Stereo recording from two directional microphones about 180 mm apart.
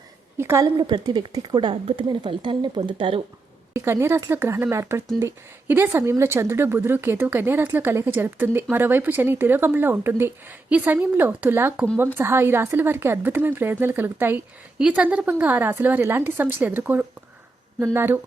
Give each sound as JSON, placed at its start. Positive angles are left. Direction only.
{"t": 0.3, "sound": "speech", "side_deg": -15}
{"t": 3.8, "sound": "speech", "side_deg": -15}